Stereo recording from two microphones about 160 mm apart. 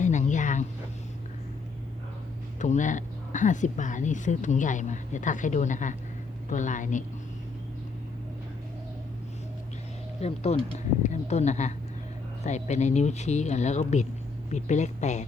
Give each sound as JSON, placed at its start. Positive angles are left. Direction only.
{"t": 0.0, "sound": "a sound", "side_deg": 50}
{"t": 2.6, "sound": "a woman's voice", "side_deg": 50}
{"t": 10.2, "sound": "a woman's voice", "side_deg": 40}